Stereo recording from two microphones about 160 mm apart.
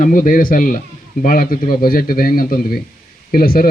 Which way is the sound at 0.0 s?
60° left (ahead or behind).